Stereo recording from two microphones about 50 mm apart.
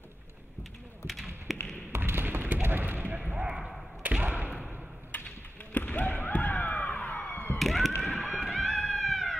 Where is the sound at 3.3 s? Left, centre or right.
Centre.